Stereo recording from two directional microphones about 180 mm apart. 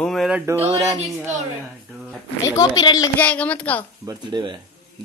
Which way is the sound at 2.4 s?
20° left (ahead or behind).